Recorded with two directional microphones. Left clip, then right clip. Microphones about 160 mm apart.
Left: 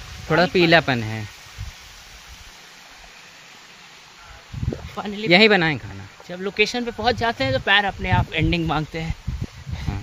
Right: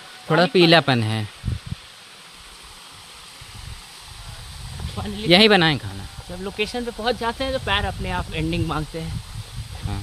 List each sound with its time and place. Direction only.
0.3 s speech: 10° right (ahead or behind)
4.9 s speech: 35° left (ahead or behind)
5.3 s speech: 10° right (ahead or behind)
6.4 s speech: 65° left (ahead or behind)